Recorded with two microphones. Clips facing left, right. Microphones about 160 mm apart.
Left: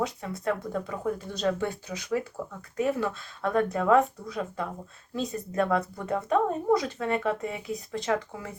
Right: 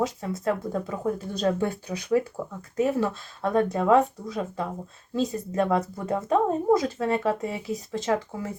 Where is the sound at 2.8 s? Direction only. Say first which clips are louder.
Right 3 dB; 30° right (ahead or behind).